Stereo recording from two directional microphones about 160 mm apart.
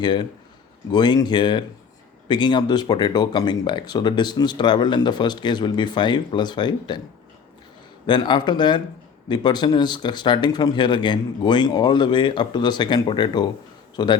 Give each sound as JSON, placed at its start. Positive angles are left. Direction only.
{"t": 0.0, "sound": "speech", "side_deg": 25}
{"t": 8.0, "sound": "a man's voice", "side_deg": 30}